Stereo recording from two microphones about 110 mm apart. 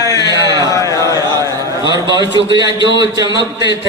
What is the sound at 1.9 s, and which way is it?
A man's voice, 40° right (ahead or behind).